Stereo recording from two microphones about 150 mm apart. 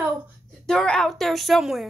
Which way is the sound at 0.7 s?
5° left (ahead or behind).